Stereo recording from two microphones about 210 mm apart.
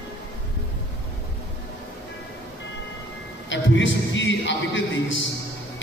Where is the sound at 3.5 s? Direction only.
60° left (ahead or behind).